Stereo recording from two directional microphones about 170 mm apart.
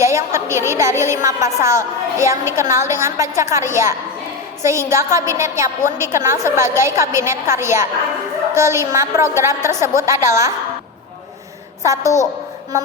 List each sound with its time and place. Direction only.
0.0 s a woman's voice: 15° right (ahead or behind)
11.9 s a woman's voice: 20° right (ahead or behind)